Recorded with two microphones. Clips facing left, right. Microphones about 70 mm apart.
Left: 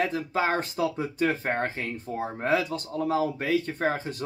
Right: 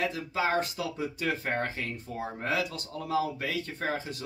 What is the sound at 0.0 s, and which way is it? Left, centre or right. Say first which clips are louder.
Speech: left 4 dB; left.